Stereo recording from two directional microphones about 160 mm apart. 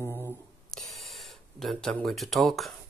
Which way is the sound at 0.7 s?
Centre (ahead or behind).